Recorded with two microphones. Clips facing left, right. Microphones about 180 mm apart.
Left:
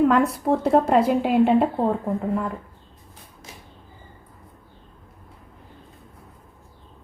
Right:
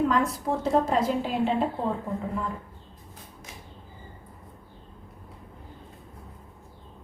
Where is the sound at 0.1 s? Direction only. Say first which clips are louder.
Left 6 dB; 60° left (ahead or behind).